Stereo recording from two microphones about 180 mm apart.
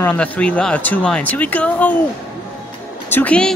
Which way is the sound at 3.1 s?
10° left (ahead or behind).